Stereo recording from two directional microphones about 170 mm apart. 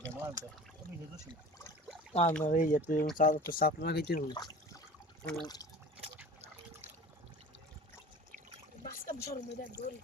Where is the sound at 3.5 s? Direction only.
65° left (ahead or behind).